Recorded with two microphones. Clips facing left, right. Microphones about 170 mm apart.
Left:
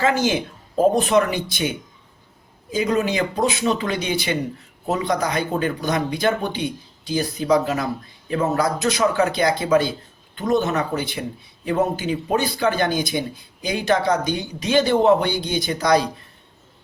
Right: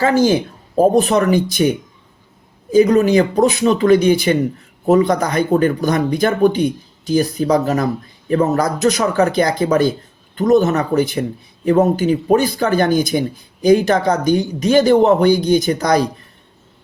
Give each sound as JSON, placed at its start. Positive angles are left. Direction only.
{"t": 0.0, "sound": "speech", "side_deg": -40}
{"t": 2.7, "sound": "speech", "side_deg": -45}